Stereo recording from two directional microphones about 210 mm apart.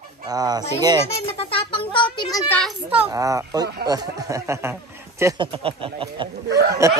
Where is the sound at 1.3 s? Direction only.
25° left (ahead or behind).